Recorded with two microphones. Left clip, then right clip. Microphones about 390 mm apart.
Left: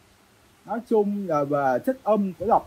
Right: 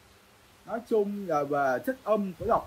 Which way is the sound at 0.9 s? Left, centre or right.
Centre.